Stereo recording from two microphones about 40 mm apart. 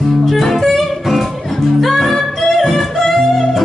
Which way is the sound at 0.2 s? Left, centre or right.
Centre.